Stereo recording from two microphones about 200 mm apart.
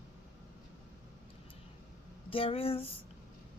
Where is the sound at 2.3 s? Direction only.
30° left (ahead or behind).